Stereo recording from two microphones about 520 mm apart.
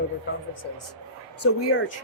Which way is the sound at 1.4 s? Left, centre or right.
Left.